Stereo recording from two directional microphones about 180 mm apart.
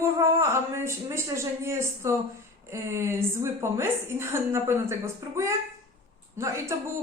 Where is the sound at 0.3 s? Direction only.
15° right (ahead or behind).